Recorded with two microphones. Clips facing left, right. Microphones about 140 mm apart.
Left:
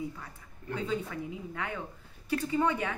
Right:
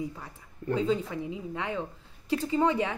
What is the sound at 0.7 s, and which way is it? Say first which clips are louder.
A woman's voice: right 6 dB; 25° right (ahead or behind).